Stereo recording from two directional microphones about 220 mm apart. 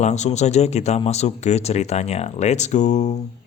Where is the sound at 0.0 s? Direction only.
30° left (ahead or behind).